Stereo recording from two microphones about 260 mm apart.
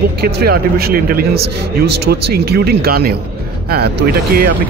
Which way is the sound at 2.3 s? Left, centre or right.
Right.